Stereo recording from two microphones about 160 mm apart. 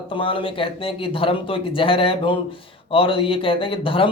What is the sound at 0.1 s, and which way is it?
Speech, 30° left (ahead or behind).